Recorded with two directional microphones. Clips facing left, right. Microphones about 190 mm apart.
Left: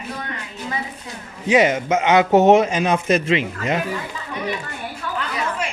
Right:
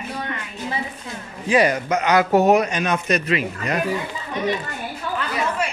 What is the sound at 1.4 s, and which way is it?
Speech, 20° left (ahead or behind).